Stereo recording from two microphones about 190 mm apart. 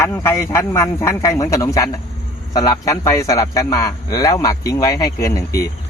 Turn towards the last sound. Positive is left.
turn(degrees=15)  # may be behind; listen again after turning